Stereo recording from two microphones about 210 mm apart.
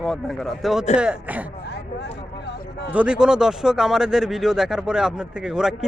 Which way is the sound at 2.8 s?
5° right (ahead or behind).